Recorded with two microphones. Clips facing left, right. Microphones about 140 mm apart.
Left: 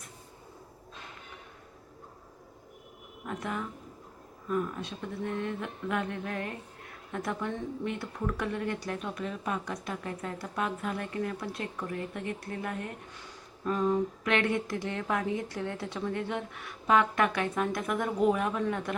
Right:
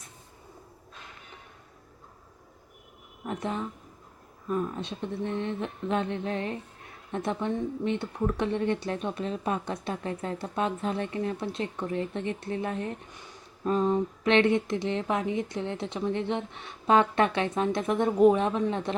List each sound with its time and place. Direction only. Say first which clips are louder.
3.2 s speech: right 3 dB; 25° right (ahead or behind)